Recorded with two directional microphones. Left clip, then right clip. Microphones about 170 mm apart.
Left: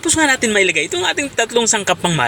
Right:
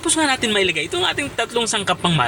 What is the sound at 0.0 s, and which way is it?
A man's voice, 20° left (ahead or behind).